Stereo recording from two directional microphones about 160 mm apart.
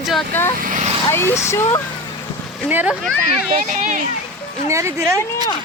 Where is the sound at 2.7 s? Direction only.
10° right (ahead or behind).